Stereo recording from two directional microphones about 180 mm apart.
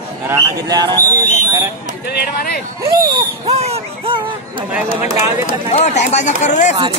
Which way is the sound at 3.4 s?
35° right (ahead or behind).